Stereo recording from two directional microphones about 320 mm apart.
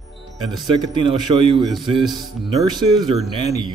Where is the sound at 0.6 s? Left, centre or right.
Centre.